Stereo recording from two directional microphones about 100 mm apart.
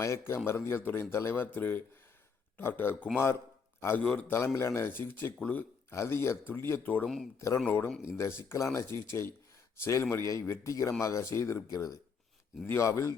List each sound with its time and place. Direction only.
0.0 s a man's voice: 25° left (ahead or behind)
4.0 s a man's voice: 10° left (ahead or behind)
4.3 s speech: 25° left (ahead or behind)
7.3 s speech: 30° left (ahead or behind)